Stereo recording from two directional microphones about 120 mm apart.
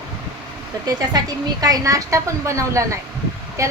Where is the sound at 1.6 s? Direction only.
30° right (ahead or behind).